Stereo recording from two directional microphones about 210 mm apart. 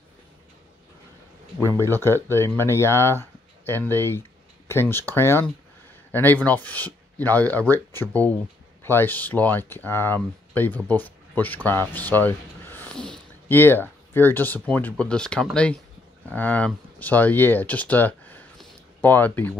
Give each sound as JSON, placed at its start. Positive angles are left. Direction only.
{"t": 1.7, "sound": "speech", "side_deg": 10}